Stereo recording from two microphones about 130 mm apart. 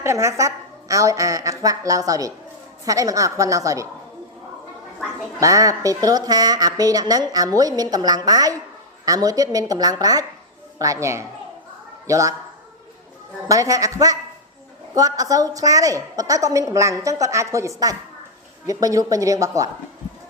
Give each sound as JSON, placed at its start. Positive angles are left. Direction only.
{"t": 0.0, "sound": "a woman's voice", "side_deg": -20}
{"t": 5.4, "sound": "a woman's voice", "side_deg": -25}
{"t": 13.5, "sound": "a woman's voice", "side_deg": -25}